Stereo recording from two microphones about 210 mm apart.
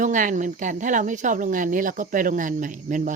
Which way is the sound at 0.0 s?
40° right (ahead or behind).